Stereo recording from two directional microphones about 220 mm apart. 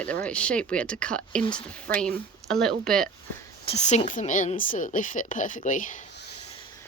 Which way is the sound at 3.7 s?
30° left (ahead or behind).